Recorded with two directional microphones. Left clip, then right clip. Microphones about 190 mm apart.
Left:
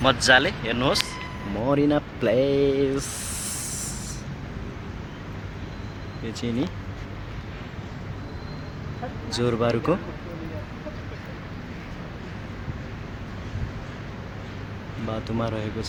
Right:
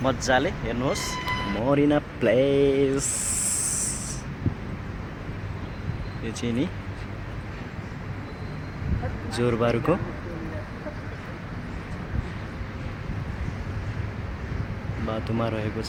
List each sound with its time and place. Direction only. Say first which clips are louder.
0.0 s speech: left 5 dB; 5° left (ahead or behind)
1.5 s speech: left 1 dB; 5° left (ahead or behind)
6.4 s speech: even; 5° left (ahead or behind)
9.4 s speech: even; 10° left (ahead or behind)
15.0 s speech: right 1 dB; 5° left (ahead or behind)